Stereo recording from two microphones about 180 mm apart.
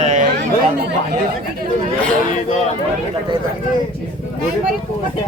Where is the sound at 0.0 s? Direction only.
40° right (ahead or behind).